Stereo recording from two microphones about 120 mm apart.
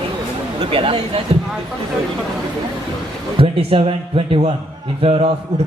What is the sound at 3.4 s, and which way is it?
A man's voice, 50° right (ahead or behind).